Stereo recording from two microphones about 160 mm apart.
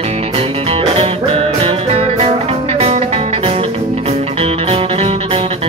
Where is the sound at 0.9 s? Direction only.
40° right (ahead or behind).